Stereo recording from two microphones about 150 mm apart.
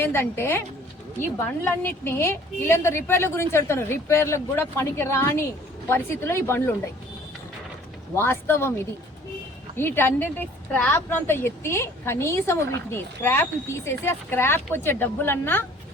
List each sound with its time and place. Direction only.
0.0 s speech: 15° left (ahead or behind)
1.6 s speech: 15° left (ahead or behind)
8.1 s speech: 15° left (ahead or behind)
9.7 s speech: 15° left (ahead or behind)